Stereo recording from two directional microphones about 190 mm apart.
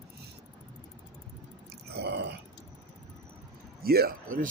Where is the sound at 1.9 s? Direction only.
60° right (ahead or behind).